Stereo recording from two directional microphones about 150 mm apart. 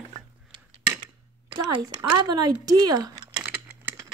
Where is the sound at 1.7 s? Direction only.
30° right (ahead or behind).